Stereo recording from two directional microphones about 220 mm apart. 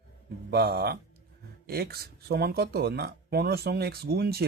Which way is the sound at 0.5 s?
45° right (ahead or behind).